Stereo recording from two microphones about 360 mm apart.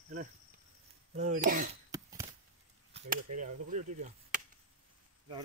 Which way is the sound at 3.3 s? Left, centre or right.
Centre.